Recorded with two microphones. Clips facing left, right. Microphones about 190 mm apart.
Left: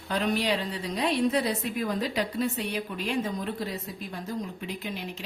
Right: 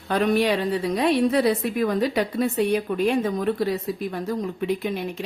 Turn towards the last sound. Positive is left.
turn(degrees=-55)  # may be behind; listen again after turning